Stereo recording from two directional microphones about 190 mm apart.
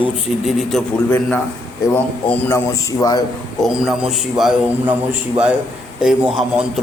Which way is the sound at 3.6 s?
Centre (ahead or behind).